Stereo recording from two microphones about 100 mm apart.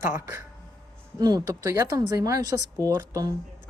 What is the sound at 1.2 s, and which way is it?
Speech, 40° right (ahead or behind).